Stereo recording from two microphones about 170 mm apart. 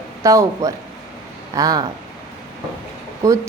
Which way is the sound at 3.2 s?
20° right (ahead or behind).